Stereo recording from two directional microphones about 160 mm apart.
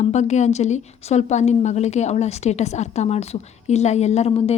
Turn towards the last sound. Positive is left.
turn(degrees=40)  # may be behind; listen again after turning